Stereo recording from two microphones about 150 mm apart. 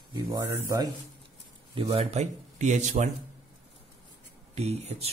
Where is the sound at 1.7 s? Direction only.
35° right (ahead or behind).